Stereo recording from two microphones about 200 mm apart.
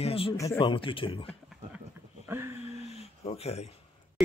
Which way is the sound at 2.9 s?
30° left (ahead or behind).